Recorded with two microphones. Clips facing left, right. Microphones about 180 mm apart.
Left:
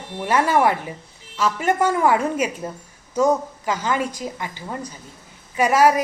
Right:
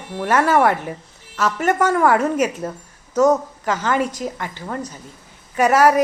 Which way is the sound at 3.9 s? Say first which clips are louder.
Right 5 dB; 50° right (ahead or behind).